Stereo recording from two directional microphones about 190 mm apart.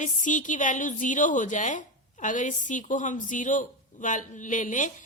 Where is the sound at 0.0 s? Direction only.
40° left (ahead or behind).